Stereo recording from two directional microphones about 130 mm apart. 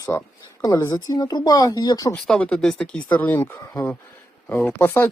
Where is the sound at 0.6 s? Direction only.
25° left (ahead or behind).